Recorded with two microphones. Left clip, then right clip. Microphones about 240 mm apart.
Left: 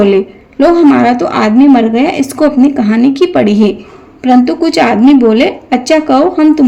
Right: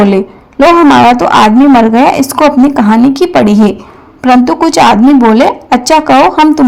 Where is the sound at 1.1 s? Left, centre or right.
Right.